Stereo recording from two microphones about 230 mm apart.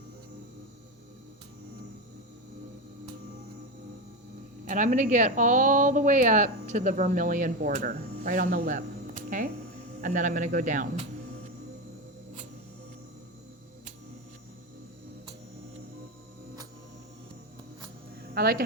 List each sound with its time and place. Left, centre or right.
4.6 s speech: right
18.3 s speech: right